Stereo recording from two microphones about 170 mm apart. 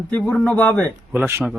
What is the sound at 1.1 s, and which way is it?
Speech, 10° right (ahead or behind).